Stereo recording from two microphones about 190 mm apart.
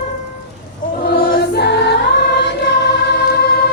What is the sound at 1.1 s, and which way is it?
Choir, 50° left (ahead or behind).